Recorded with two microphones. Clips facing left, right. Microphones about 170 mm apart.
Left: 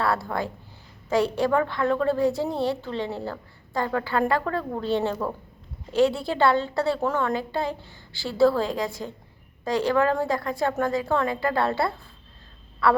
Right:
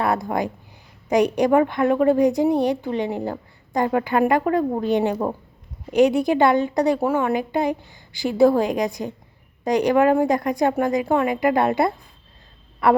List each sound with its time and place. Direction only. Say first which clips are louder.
0.0 s a woman's voice: right 4 dB; 20° right (ahead or behind)